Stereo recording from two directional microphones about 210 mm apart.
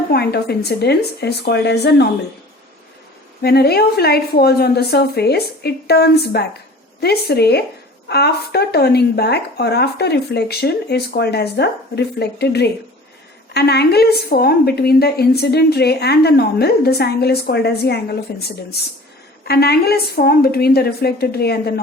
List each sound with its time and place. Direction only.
0.1 s a woman's voice: 50° left (ahead or behind)
3.4 s a woman's voice: 50° left (ahead or behind)